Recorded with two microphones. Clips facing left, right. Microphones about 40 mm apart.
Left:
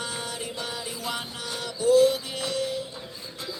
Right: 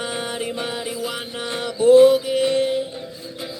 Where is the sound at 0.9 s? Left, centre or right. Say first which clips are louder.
Right 5 dB; centre.